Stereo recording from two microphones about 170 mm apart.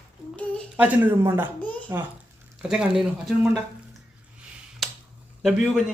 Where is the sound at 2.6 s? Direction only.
5° right (ahead or behind).